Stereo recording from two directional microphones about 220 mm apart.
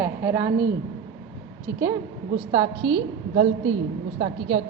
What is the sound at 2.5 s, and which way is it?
A woman's voice, 20° right (ahead or behind).